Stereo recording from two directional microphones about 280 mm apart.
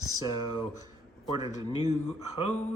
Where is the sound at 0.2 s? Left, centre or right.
Centre.